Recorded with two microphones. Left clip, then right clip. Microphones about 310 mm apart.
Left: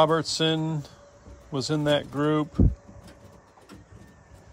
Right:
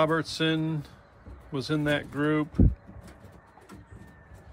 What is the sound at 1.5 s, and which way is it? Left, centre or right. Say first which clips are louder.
Speech: left 3 dB; centre.